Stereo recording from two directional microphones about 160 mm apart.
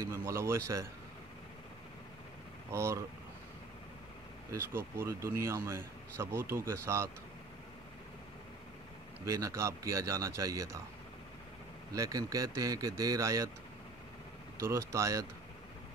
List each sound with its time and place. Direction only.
0.1 s speech: 15° right (ahead or behind)
2.7 s speech: 15° right (ahead or behind)
4.5 s speech: 15° right (ahead or behind)
9.2 s a man's voice: 20° right (ahead or behind)
11.9 s a man's voice: 20° right (ahead or behind)
14.6 s speech: 20° right (ahead or behind)